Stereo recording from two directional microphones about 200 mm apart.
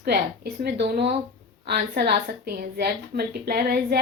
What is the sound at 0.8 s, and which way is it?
A woman's voice, 55° right (ahead or behind).